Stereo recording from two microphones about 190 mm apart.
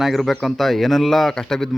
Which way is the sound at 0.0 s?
Centre (ahead or behind).